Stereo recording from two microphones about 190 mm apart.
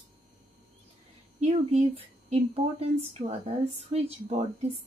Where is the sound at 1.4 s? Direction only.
35° right (ahead or behind).